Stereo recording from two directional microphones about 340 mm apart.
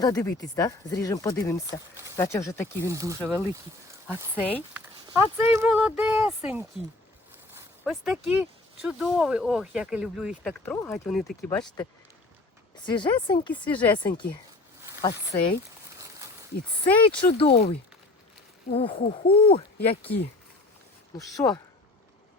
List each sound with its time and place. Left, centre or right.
0.0 s speech: centre
2.9 s speech: centre
17.1 s speech: centre
21.2 s speech: centre